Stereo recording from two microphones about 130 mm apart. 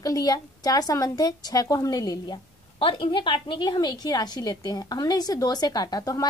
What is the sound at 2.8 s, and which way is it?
A woman's voice, 40° left (ahead or behind).